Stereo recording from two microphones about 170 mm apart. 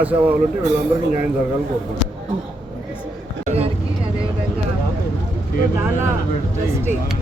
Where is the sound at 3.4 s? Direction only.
35° right (ahead or behind).